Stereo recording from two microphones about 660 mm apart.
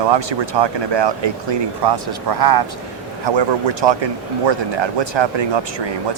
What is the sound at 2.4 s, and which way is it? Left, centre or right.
Speech, right.